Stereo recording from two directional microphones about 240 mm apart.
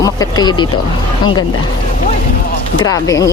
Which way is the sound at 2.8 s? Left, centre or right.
Centre.